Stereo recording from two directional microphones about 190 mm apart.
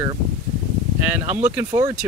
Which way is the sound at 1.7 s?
20° right (ahead or behind).